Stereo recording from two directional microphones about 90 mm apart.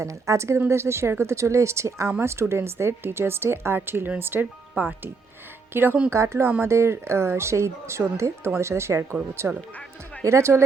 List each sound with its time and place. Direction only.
0.0 s speech: 35° right (ahead or behind)